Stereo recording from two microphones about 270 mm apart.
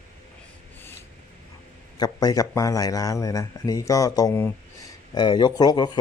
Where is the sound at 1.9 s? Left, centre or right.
Centre.